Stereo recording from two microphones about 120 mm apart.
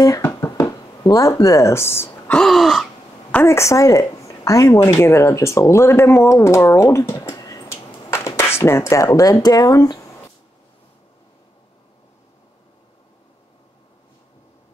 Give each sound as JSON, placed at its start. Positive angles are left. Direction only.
{"t": 0.2, "sound": "a sound", "side_deg": 20}
{"t": 2.3, "sound": "gasp", "side_deg": 0}
{"t": 3.3, "sound": "speech", "side_deg": 15}